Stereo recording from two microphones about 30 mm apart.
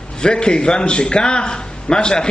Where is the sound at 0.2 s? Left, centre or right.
Left.